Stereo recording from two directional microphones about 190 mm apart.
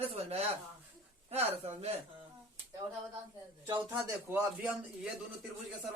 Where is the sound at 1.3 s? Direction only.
35° right (ahead or behind).